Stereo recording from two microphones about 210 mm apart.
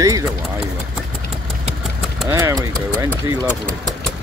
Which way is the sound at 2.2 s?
15° right (ahead or behind).